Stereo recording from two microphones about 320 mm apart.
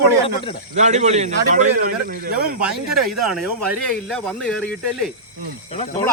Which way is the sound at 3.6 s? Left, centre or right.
Right.